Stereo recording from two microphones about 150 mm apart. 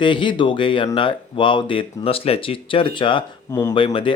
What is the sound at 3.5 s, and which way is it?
Speech, 20° left (ahead or behind).